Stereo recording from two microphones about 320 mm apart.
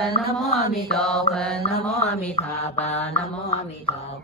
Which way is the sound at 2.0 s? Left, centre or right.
Centre.